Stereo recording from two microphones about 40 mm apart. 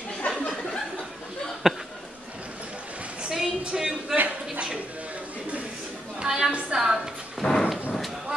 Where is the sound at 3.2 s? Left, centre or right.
Centre.